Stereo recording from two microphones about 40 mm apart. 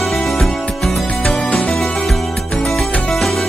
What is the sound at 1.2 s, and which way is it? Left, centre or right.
Music, left.